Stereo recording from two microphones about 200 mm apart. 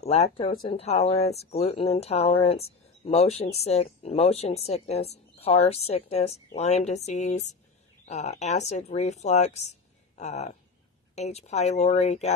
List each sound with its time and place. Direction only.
0.0 s speech: 30° left (ahead or behind)